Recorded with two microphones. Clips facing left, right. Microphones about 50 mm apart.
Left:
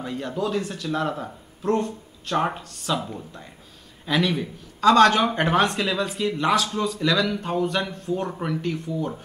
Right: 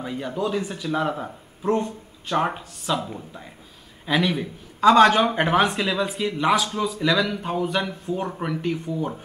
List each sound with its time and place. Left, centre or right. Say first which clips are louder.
0.0 s speech: right 1 dB; centre